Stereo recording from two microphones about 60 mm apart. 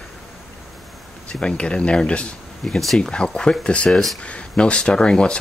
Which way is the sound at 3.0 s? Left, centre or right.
Centre.